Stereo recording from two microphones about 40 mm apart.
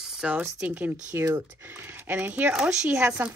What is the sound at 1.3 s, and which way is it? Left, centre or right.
Speech, right.